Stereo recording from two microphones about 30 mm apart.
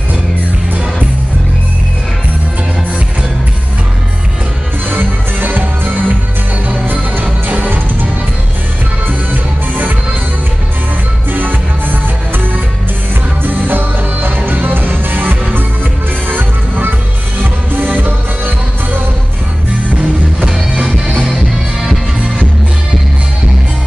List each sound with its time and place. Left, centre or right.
5.4 s music: right
7.5 s music: right
9.3 s music: right
11.3 s music: right
13.5 s music: right
16.3 s music: right